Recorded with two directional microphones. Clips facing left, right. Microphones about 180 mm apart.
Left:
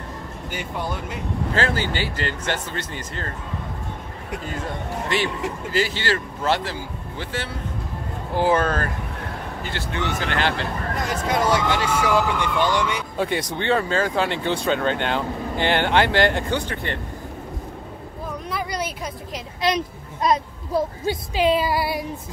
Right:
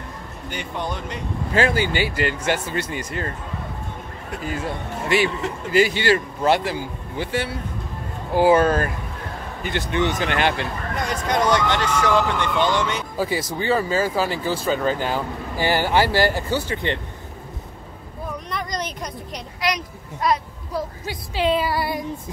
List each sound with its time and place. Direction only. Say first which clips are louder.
0.5 s speech: right 1 dB; 5° left (ahead or behind)
1.5 s speech: right 4 dB; 15° right (ahead or behind)
4.5 s speech: right 3 dB; 10° right (ahead or behind)
11.0 s speech: right 1 dB; 5° left (ahead or behind)
13.2 s speech: even; 5° right (ahead or behind)
16.7 s speech: right 4 dB; 20° right (ahead or behind)
18.5 s a sound: left 2 dB; 5° left (ahead or behind)
19.6 s a child's voice: left 3 dB; 25° left (ahead or behind)
21.4 s speech: even; 15° left (ahead or behind)